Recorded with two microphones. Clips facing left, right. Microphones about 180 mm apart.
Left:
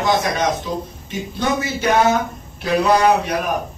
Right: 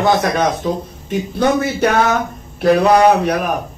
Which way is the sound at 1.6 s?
60° right (ahead or behind).